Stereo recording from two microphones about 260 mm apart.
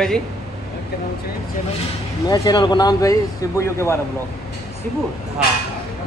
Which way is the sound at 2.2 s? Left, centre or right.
Centre.